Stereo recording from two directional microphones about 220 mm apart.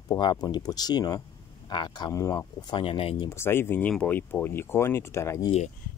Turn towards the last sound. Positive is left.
turn(degrees=15)  # may be behind; listen again after turning